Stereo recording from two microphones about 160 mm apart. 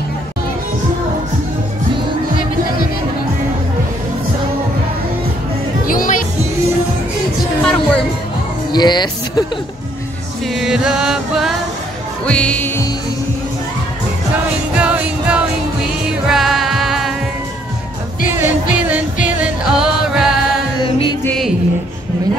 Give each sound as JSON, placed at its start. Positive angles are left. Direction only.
{"t": 5.9, "sound": "music", "side_deg": 60}
{"t": 7.6, "sound": "music", "side_deg": 5}
{"t": 8.7, "sound": "speech", "side_deg": 25}
{"t": 10.5, "sound": "music", "side_deg": -5}
{"t": 14.8, "sound": "music", "side_deg": -10}
{"t": 18.2, "sound": "music", "side_deg": -15}
{"t": 20.8, "sound": "music", "side_deg": 30}